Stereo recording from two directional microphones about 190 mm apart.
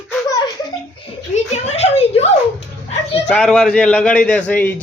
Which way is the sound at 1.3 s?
35° left (ahead or behind).